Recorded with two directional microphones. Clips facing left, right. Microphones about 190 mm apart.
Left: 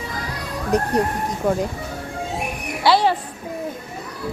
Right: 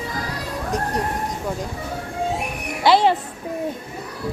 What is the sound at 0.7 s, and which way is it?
Speech, 65° left (ahead or behind).